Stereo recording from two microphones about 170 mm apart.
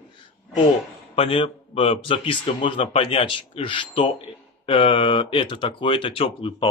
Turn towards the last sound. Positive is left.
turn(degrees=30)  # may be behind; listen again after turning